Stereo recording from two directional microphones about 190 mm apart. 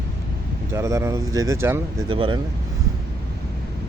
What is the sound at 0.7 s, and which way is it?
Speech, 15° right (ahead or behind).